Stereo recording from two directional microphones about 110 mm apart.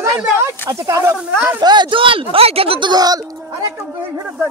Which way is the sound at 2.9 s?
35° right (ahead or behind).